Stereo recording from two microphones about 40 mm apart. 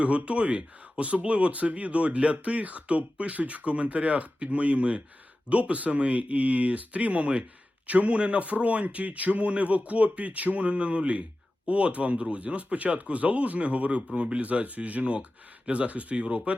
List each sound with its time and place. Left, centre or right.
0.0 s speech: right